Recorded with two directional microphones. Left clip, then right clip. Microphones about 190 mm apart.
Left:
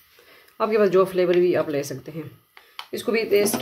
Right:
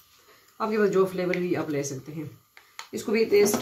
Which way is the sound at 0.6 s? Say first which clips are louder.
Left 5 dB; 55° left (ahead or behind).